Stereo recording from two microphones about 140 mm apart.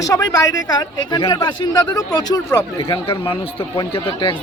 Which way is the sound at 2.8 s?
40° left (ahead or behind).